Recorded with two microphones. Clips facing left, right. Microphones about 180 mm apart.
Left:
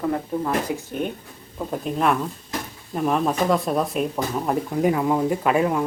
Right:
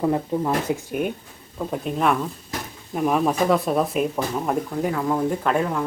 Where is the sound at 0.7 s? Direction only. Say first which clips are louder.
Right 3 dB; 25° right (ahead or behind).